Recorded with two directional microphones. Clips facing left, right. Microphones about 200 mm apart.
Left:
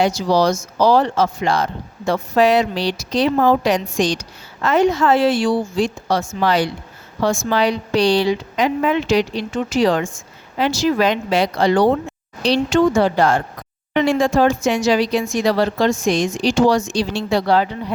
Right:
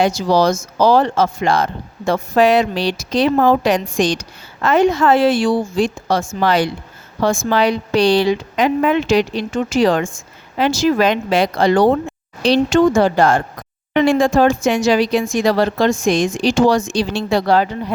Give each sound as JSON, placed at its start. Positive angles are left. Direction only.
{"t": 0.0, "sound": "speech", "side_deg": -50}